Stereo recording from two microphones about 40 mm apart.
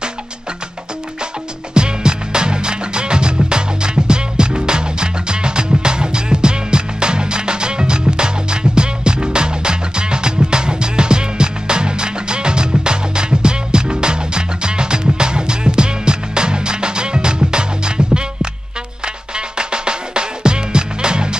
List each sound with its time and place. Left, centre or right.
1.7 s music: right